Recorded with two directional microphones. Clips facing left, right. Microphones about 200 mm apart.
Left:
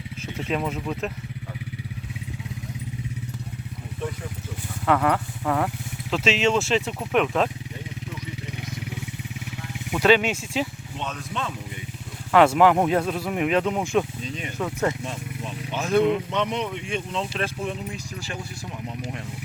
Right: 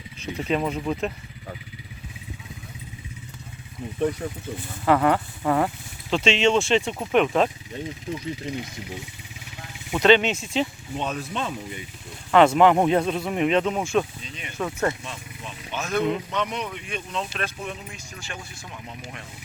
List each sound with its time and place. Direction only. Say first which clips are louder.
0.3 s speech: right 2 dB; centre (ahead or behind)
4.9 s speech: right 2 dB; centre (ahead or behind)
9.9 s speech: right 1 dB; 5° left (ahead or behind)
10.9 s speech: right 4 dB; 10° right (ahead or behind); by 14.9 s 15° left (ahead or behind)
15.8 s speech: left 4 dB; 30° left (ahead or behind)